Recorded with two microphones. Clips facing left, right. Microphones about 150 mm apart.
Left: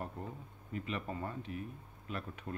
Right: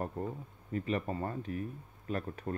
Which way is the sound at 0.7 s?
40° right (ahead or behind).